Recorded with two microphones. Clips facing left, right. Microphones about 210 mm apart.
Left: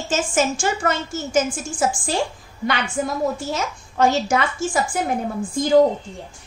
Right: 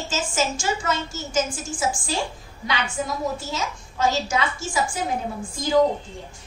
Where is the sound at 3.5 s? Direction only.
60° left (ahead or behind).